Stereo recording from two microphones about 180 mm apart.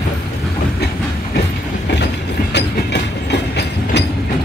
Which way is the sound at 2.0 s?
70° left (ahead or behind).